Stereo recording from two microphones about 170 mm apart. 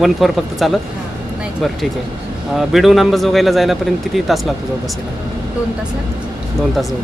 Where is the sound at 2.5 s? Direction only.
Centre (ahead or behind).